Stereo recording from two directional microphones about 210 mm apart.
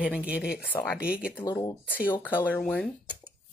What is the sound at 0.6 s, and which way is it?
Speech, 5° left (ahead or behind).